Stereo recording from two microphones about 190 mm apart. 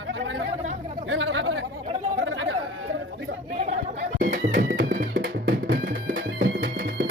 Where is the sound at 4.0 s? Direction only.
40° right (ahead or behind).